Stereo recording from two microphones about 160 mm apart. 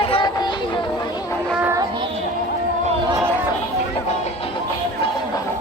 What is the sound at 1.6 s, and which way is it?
Music, 15° right (ahead or behind).